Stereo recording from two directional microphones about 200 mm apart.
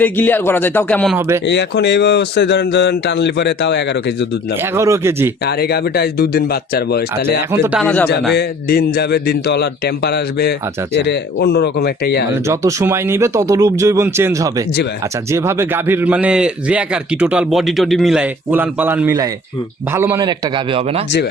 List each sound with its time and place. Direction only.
0.0 s speech: 10° left (ahead or behind)
1.5 s speech: 60° left (ahead or behind)
4.7 s a man's voice: 15° right (ahead or behind)
5.5 s speech: 50° left (ahead or behind)
7.5 s a man's voice: 10° right (ahead or behind)
7.8 s speech: 5° left (ahead or behind)
9.0 s speech: 55° left (ahead or behind)
12.5 s a man's voice: 15° right (ahead or behind)